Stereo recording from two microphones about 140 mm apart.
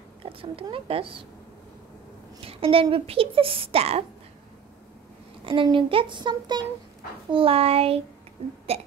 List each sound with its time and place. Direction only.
0.2 s speech: 40° right (ahead or behind)
2.4 s speech: 40° right (ahead or behind)
5.4 s speech: 40° right (ahead or behind)